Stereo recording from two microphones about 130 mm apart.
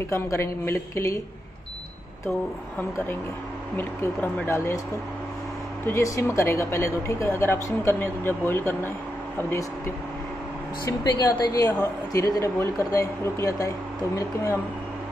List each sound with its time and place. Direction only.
0.1 s a woman's voice: 20° left (ahead or behind)
3.7 s a woman's voice: 20° left (ahead or behind)
5.9 s a woman's voice: 25° left (ahead or behind)
10.9 s a woman's voice: 35° left (ahead or behind)